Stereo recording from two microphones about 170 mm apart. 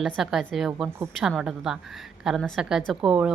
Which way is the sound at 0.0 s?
Centre (ahead or behind).